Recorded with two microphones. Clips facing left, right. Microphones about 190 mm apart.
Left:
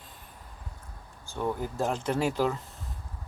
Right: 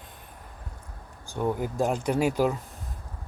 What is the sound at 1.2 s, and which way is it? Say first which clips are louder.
Speech: right 3 dB; 15° right (ahead or behind).